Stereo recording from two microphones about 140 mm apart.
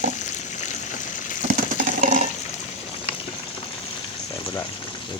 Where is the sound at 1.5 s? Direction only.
70° right (ahead or behind).